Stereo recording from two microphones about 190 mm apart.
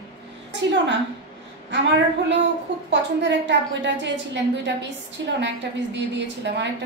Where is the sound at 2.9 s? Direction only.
70° right (ahead or behind).